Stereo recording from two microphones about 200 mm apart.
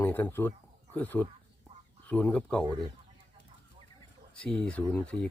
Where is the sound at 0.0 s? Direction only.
10° left (ahead or behind).